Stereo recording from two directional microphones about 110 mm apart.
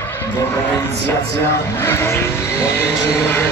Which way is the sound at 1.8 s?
25° left (ahead or behind).